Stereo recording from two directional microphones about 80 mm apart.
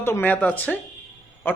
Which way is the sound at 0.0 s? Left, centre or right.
Left.